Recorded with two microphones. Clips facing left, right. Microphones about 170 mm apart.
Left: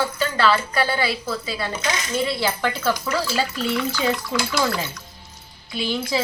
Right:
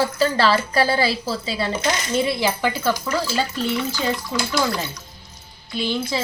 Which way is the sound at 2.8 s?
Centre (ahead or behind).